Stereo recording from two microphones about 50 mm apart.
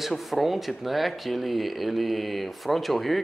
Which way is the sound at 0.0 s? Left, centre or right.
Centre.